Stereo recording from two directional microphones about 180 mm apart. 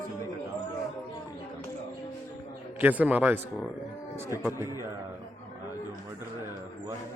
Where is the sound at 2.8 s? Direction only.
10° right (ahead or behind).